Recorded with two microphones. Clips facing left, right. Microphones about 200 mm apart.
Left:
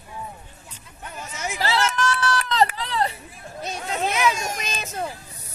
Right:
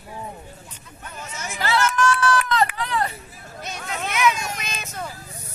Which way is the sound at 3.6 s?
30° left (ahead or behind).